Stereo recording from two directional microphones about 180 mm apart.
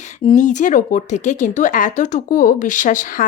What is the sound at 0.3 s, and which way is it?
Speech, 45° left (ahead or behind).